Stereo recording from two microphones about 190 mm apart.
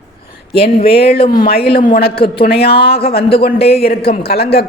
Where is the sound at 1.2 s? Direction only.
25° left (ahead or behind).